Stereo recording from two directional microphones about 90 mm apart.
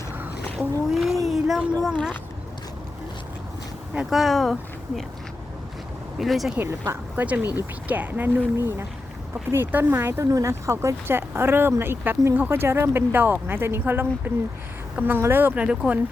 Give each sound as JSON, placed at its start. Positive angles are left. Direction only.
{"t": 0.5, "sound": "speech", "side_deg": 0}
{"t": 1.3, "sound": "a sound", "side_deg": -5}
{"t": 3.9, "sound": "speech", "side_deg": 0}
{"t": 6.1, "sound": "speech", "side_deg": 0}
{"t": 6.6, "sound": "speech", "side_deg": -30}
{"t": 7.3, "sound": "speech", "side_deg": -15}
{"t": 15.5, "sound": "speech", "side_deg": -10}